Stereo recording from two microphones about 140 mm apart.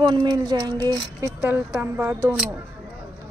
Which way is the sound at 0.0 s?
30° right (ahead or behind).